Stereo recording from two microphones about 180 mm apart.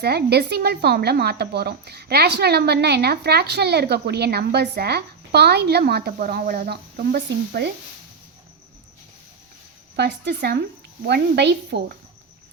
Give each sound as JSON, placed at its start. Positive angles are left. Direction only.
{"t": 0.0, "sound": "speech", "side_deg": -65}
{"t": 9.9, "sound": "speech", "side_deg": -65}